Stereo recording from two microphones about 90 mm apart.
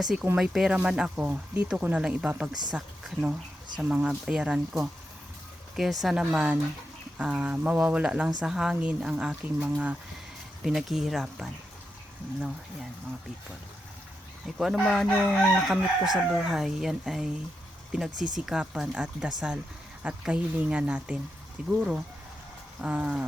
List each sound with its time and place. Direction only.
0.0 s speech: 5° right (ahead or behind)
1.2 s speech: 20° right (ahead or behind)
2.5 s speech: 50° right (ahead or behind)
3.8 s speech: 15° right (ahead or behind)
10.6 s speech: 5° right (ahead or behind)
14.4 s speech: 5° right (ahead or behind)
14.8 s chicken: 10° left (ahead or behind)
15.6 s speech: centre (ahead or behind)